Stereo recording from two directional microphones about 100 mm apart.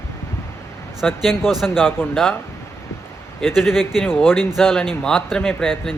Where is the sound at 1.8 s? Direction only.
20° left (ahead or behind).